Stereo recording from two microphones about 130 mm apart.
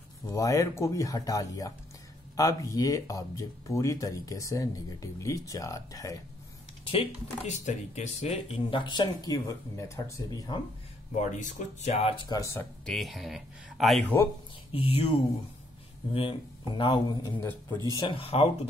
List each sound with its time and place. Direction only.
0.3 s speech: 25° left (ahead or behind)
6.8 s typing: 45° left (ahead or behind)
7.4 s speech: 65° left (ahead or behind)
8.6 s speech: 40° left (ahead or behind)
11.1 s speech: 65° left (ahead or behind); by 12.3 s 50° left (ahead or behind)
12.3 s speech: 25° left (ahead or behind)
12.8 s speech: centre (ahead or behind)
14.7 s speech: 45° left (ahead or behind)
17.4 s speech: 15° left (ahead or behind)
18.0 s speech: 45° left (ahead or behind)